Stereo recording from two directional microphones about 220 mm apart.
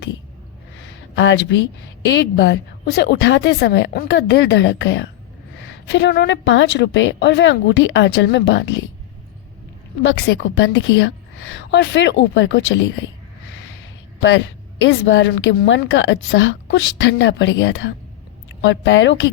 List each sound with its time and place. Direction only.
0.8 s a sound: 55° left (ahead or behind)
2.0 s a woman's voice: 50° left (ahead or behind)
10.0 s a woman's voice: 50° left (ahead or behind)
14.2 s a man's voice: 55° left (ahead or behind)